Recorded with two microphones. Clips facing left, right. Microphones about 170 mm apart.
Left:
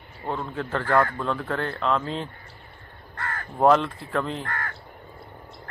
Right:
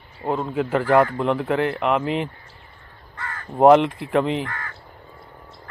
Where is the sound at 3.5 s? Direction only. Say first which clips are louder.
Right 6 dB; 20° right (ahead or behind).